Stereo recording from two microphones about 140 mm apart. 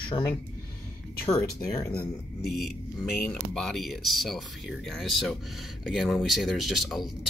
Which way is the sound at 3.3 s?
5° left (ahead or behind).